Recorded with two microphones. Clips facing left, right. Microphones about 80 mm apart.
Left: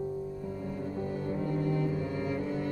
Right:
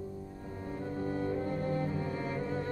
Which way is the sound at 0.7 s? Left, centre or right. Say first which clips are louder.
Right 2 dB; right.